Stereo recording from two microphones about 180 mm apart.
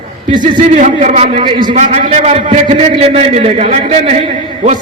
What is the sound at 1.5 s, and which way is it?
Speech, 25° right (ahead or behind).